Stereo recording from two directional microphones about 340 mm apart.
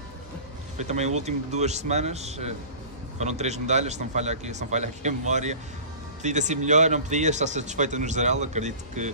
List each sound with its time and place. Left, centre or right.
0.7 s speech: centre